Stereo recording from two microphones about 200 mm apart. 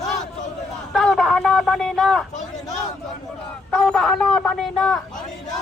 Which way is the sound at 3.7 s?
5° left (ahead or behind).